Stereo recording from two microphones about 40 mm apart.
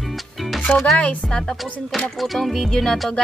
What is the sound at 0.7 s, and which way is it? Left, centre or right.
Speech, left.